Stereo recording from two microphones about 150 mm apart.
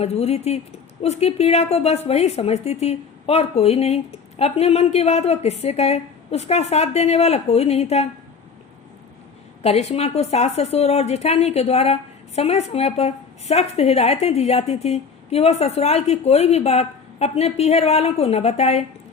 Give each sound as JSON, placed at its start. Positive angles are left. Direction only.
{"t": 0.0, "sound": "a woman's voice", "side_deg": 45}
{"t": 9.6, "sound": "a woman's voice", "side_deg": 45}